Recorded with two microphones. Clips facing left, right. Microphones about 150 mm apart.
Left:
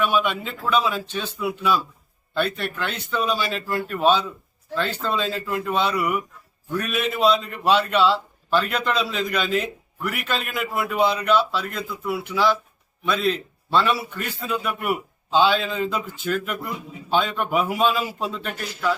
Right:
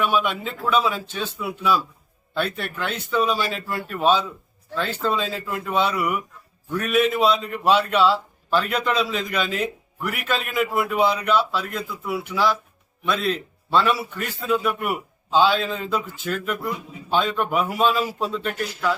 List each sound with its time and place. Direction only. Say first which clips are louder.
0.0 s a man's voice: even; centre (ahead or behind)